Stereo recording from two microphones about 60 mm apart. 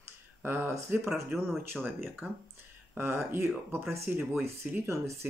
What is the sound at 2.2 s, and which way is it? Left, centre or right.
Speech, right.